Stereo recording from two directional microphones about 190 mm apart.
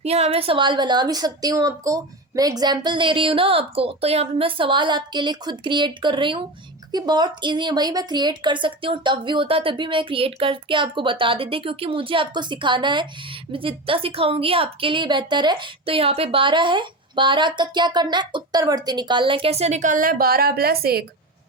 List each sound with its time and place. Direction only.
0.0 s a woman's voice: 35° right (ahead or behind); by 21.0 s 55° right (ahead or behind)